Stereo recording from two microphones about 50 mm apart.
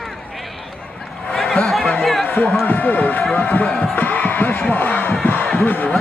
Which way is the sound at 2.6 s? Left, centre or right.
Left.